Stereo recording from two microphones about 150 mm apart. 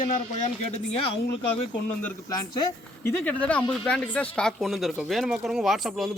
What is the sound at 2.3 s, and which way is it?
Speech, 25° left (ahead or behind).